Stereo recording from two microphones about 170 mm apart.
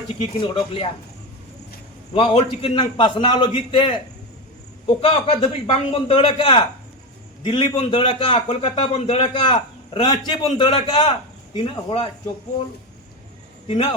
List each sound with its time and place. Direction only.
0.2 s a man's voice: 30° left (ahead or behind)
2.1 s a man's voice: 30° left (ahead or behind)
4.9 s a man's voice: 35° left (ahead or behind)
13.7 s a man's voice: 30° left (ahead or behind)